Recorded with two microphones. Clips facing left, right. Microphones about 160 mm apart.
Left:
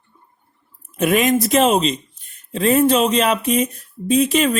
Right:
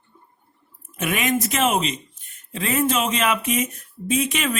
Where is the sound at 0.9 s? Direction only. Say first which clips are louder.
Left 7 dB; 35° left (ahead or behind).